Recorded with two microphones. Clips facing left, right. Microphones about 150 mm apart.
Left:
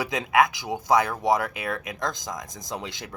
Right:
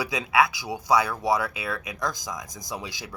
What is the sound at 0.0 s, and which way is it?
Speech, 50° left (ahead or behind).